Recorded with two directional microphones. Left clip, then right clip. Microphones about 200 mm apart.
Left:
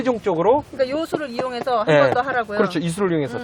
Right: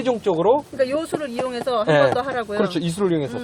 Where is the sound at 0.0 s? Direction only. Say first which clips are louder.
Even; 10° left (ahead or behind).